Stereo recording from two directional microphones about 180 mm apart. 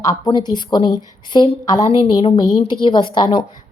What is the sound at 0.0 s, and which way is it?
A woman's voice, 20° left (ahead or behind).